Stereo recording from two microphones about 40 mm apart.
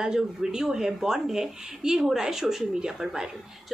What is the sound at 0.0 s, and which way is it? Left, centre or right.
A woman's voice, centre.